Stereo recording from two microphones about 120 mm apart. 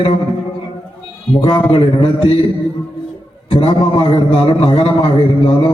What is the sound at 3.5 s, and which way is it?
A man's voice, 45° left (ahead or behind).